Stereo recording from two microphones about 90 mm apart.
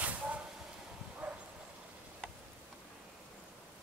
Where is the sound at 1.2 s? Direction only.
20° right (ahead or behind).